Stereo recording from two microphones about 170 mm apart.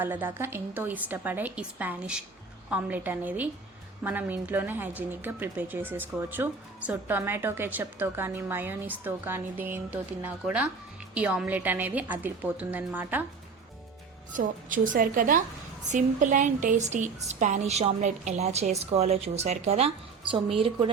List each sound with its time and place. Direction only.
0.0 s a woman's voice: 10° right (ahead or behind)
14.3 s a woman's voice: 50° right (ahead or behind); by 20.4 s 35° right (ahead or behind)